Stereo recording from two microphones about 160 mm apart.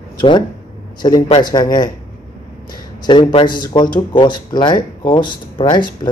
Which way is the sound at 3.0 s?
30° left (ahead or behind).